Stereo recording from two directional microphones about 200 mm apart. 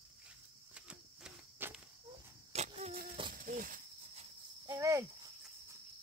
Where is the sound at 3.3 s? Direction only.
45° right (ahead or behind).